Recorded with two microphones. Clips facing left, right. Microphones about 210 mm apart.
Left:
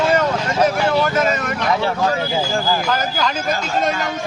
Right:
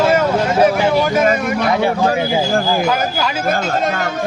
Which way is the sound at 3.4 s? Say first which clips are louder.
Right 5 dB; 55° right (ahead or behind).